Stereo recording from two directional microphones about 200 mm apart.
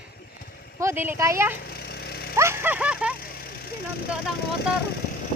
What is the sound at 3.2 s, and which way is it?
Vehicle, 50° left (ahead or behind).